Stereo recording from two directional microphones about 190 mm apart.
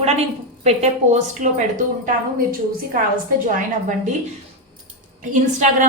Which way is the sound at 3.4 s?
45° right (ahead or behind).